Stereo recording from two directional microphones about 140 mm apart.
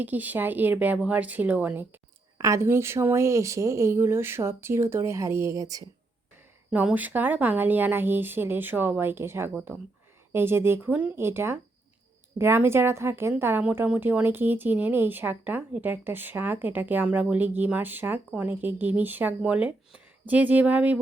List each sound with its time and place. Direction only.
0.0 s a woman's voice: 10° right (ahead or behind)
6.7 s a woman's voice: 10° right (ahead or behind)